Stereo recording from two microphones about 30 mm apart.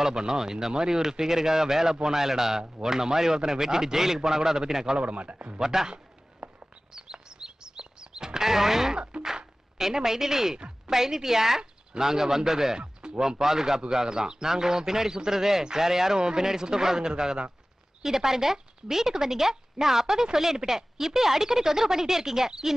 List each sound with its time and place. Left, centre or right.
0.0 s speech: right
4.9 s speech: right
5.6 s speech: centre
6.4 s a sound: right
6.9 s chirp: right
9.1 s music: right
9.8 s speech: centre
12.8 s music: right
13.2 s a man's voice: centre